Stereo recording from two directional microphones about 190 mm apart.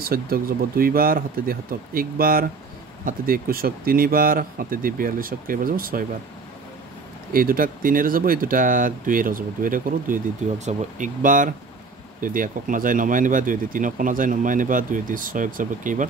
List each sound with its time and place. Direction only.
0.0 s speech: 50° right (ahead or behind)
7.3 s speech: 50° right (ahead or behind)